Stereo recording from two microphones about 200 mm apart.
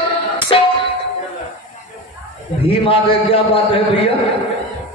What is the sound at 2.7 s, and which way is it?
A man's voice, 25° left (ahead or behind).